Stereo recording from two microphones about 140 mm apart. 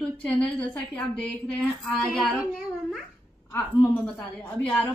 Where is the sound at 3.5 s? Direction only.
15° left (ahead or behind).